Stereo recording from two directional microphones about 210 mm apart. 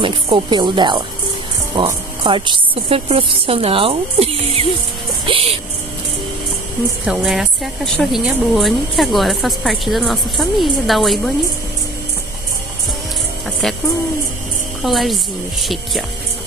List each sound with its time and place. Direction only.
0.0 s speech: 25° right (ahead or behind)
7.1 s a woman's voice: centre (ahead or behind)
14.8 s a woman's voice: centre (ahead or behind)